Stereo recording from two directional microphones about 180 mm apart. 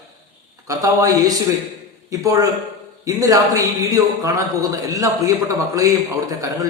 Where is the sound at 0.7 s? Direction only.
20° right (ahead or behind).